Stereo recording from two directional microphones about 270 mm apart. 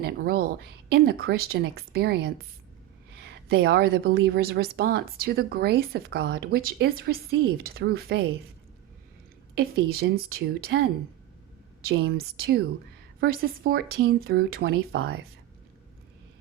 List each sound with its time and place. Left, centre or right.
0.0 s a woman's voice: right
9.6 s a woman's voice: right
11.9 s a woman's voice: right